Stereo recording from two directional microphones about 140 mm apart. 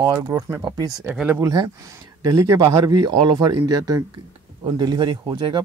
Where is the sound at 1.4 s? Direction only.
30° right (ahead or behind).